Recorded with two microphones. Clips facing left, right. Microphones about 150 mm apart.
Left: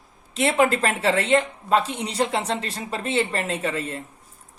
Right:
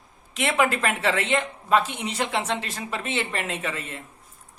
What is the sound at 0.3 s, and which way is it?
A woman's voice, 35° left (ahead or behind).